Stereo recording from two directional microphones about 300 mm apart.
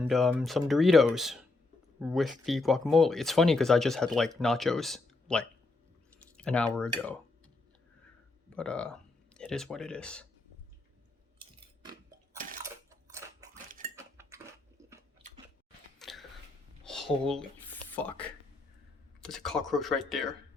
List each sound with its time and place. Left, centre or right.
0.0 s speech: centre
8.5 s speech: centre
11.8 s chewing: centre
12.6 s crushing: centre
13.7 s cutlery: right
13.9 s cutlery: centre
16.0 s chewing: centre
16.8 s a sound: centre
17.9 s speech: centre